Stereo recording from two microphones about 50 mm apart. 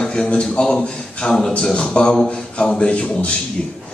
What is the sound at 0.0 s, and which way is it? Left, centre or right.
A man's voice, centre.